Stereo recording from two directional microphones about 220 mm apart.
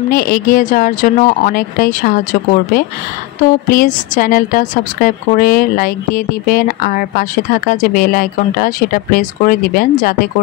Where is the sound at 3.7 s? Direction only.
40° left (ahead or behind).